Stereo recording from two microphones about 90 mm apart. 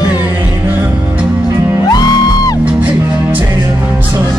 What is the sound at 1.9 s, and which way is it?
Music, 45° left (ahead or behind).